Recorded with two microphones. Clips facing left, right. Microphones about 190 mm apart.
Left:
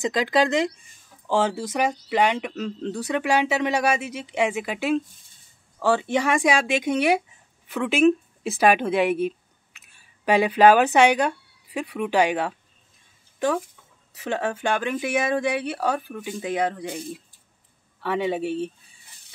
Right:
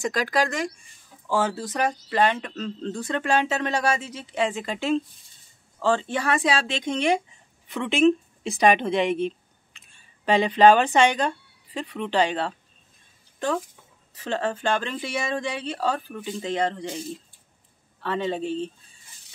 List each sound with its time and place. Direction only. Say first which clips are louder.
0.0 s speech: left 3 dB; 20° left (ahead or behind)
14.1 s speech: left 1 dB; 10° left (ahead or behind)